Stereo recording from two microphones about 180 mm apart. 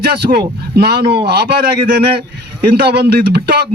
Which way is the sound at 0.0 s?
60° right (ahead or behind).